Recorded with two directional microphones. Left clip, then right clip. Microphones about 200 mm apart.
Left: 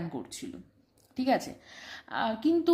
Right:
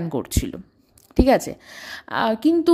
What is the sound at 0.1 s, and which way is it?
A woman's voice, 50° right (ahead or behind).